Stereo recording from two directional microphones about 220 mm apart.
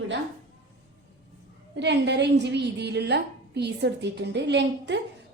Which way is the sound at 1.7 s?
50° right (ahead or behind).